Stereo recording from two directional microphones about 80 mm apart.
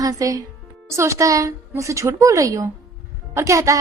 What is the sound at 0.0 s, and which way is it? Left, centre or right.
Speech, right.